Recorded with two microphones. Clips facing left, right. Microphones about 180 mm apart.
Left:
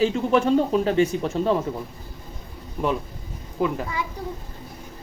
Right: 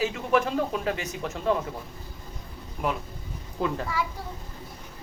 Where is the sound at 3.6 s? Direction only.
15° left (ahead or behind).